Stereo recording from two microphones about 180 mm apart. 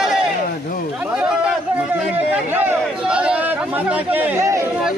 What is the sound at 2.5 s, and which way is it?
Chatter, 10° right (ahead or behind).